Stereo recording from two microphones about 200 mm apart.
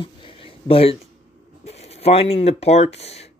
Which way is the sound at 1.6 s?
30° left (ahead or behind).